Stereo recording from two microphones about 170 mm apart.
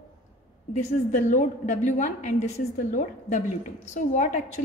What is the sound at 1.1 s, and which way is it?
A woman's voice, 50° left (ahead or behind).